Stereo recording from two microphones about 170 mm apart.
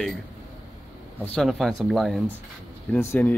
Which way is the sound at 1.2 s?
5° left (ahead or behind).